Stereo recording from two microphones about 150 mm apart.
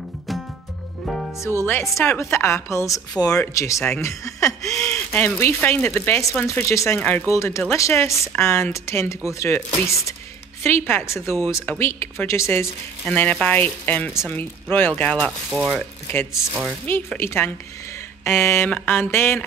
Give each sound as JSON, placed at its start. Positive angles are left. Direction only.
{"t": 1.0, "sound": "music", "side_deg": 0}
{"t": 1.4, "sound": "a woman's voice", "side_deg": 15}
{"t": 16.1, "sound": "speech", "side_deg": 15}